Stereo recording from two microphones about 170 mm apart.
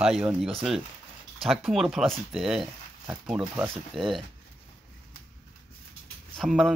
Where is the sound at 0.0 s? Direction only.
5° right (ahead or behind).